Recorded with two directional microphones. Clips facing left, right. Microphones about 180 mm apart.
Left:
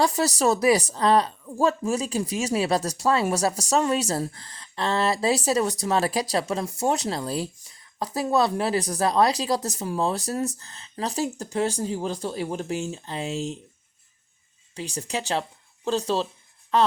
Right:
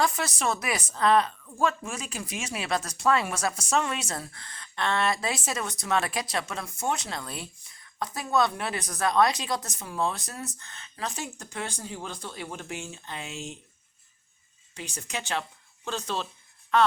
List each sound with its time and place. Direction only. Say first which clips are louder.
0.0 s a woman's voice: left 6 dB; 35° left (ahead or behind)
14.8 s a woman's voice: left 6 dB; 35° left (ahead or behind)